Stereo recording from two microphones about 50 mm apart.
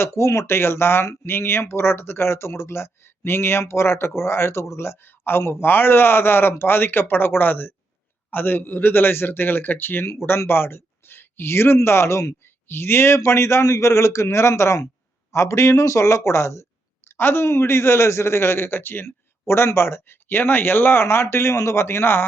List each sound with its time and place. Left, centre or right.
0.0 s speech: left
5.0 s a man's voice: left
17.1 s speech: left
20.2 s a man's voice: left